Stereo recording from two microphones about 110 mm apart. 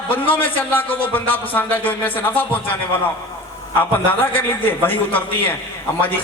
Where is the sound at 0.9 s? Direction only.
15° left (ahead or behind).